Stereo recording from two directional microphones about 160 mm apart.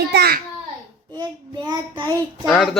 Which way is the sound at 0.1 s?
80° right.